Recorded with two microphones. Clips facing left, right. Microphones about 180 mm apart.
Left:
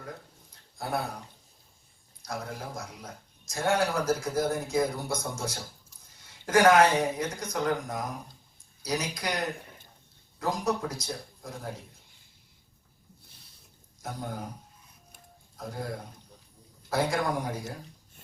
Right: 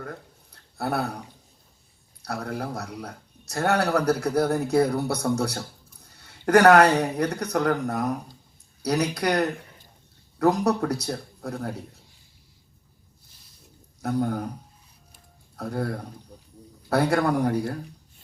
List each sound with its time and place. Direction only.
0.5 s a sound: 65° right (ahead or behind)
2.2 s speech: 65° right (ahead or behind)
14.0 s speech: 65° right (ahead or behind)
15.5 s speech: 65° right (ahead or behind)